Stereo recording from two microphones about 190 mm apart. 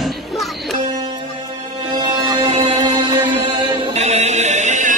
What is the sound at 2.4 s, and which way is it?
Music, 20° right (ahead or behind).